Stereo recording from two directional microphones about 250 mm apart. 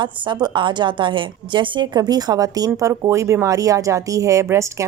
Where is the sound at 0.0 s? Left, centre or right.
Centre.